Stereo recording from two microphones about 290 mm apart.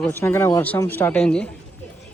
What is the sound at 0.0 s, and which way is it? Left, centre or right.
Speech, centre.